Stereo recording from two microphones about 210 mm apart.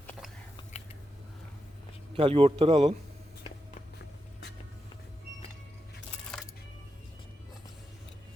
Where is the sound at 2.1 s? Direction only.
25° right (ahead or behind).